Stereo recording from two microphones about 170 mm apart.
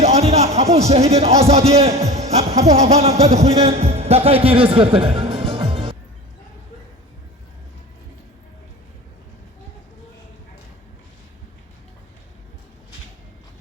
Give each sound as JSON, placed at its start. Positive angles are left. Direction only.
{"t": 0.0, "sound": "a man's voice", "side_deg": -40}